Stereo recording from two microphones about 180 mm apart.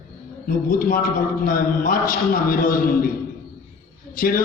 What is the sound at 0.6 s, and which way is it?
A man's voice, 50° left (ahead or behind).